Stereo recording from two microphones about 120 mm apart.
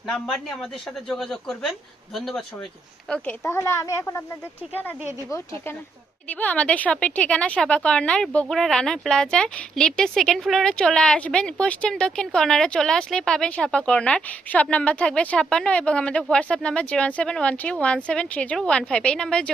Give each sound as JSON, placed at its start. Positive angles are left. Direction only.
{"t": 0.1, "sound": "speech", "side_deg": 10}
{"t": 3.4, "sound": "speech", "side_deg": 20}
{"t": 6.2, "sound": "speech", "side_deg": 10}